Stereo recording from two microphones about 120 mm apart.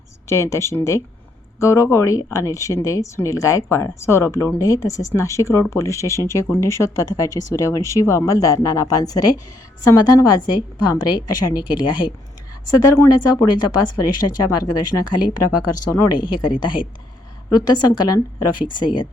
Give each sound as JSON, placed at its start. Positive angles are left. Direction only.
{"t": 0.3, "sound": "speech", "side_deg": 25}
{"t": 16.1, "sound": "speech", "side_deg": 40}